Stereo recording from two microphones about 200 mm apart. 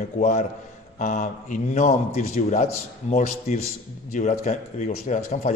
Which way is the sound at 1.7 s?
35° left (ahead or behind).